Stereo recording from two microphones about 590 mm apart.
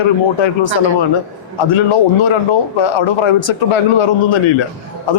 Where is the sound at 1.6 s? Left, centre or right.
Left.